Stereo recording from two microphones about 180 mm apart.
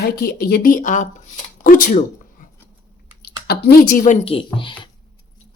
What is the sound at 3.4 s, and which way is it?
Speech, 60° left (ahead or behind).